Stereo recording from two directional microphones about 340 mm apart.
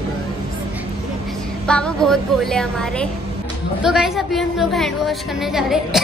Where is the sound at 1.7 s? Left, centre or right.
Centre.